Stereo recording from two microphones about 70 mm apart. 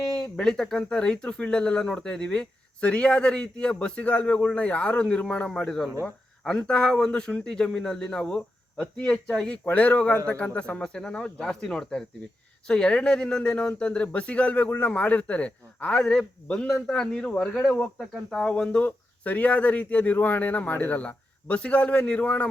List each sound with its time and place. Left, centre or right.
0.1 s speech: centre
9.6 s speech: left; by 18.5 s centre
18.5 s speech: centre